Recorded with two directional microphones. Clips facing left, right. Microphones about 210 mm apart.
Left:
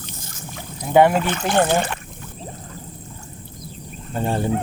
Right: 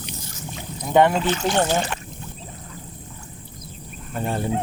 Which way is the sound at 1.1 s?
55° left (ahead or behind).